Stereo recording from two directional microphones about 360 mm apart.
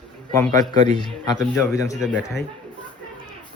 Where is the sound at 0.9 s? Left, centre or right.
Centre.